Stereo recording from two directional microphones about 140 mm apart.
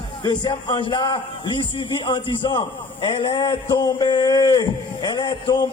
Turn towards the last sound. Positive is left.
turn(degrees=35)  # may be behind; listen again after turning